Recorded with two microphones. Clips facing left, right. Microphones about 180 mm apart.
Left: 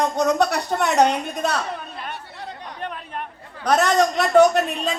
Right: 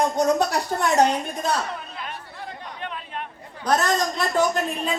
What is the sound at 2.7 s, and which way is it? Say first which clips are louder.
Chatter: left 2 dB; 45° left (ahead or behind).